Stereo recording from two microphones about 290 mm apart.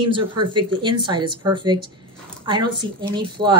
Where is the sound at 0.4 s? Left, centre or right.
Centre.